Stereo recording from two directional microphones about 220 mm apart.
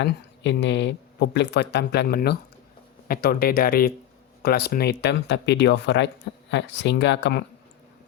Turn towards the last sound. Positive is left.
turn(degrees=50)  # may be behind; listen again after turning